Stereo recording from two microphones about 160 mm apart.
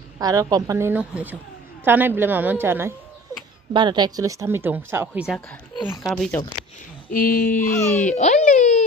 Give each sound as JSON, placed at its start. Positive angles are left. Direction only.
{"t": 0.2, "sound": "a woman's voice", "side_deg": -25}
{"t": 3.7, "sound": "speech", "side_deg": -25}
{"t": 7.1, "sound": "a sound", "side_deg": 65}
{"t": 7.6, "sound": "speech", "side_deg": 15}
{"t": 8.0, "sound": "baby cry", "side_deg": 45}